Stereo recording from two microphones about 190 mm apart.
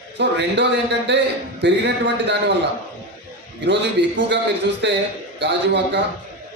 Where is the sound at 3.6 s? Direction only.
65° right (ahead or behind).